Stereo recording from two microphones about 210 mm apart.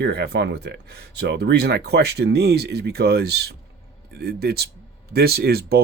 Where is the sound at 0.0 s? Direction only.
50° right (ahead or behind).